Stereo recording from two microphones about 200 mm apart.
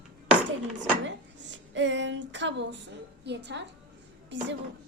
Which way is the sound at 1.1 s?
65° right (ahead or behind).